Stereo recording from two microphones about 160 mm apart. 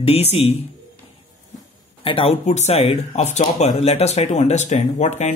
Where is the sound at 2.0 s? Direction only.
35° left (ahead or behind).